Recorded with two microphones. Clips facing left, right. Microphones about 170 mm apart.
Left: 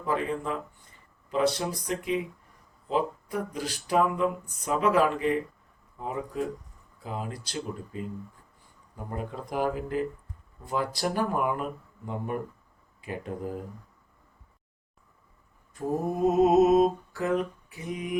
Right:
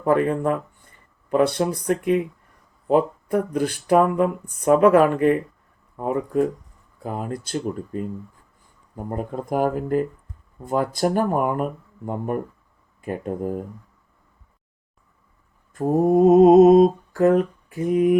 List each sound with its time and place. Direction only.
0.0 s speech: 55° right (ahead or behind)
7.0 s mantra: 50° right (ahead or behind)
9.0 s mantra: 45° right (ahead or behind)
15.7 s mantra: 50° right (ahead or behind)